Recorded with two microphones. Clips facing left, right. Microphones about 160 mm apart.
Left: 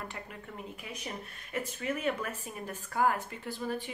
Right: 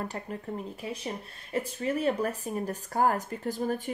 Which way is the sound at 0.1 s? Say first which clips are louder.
Right 8 dB; 35° right (ahead or behind).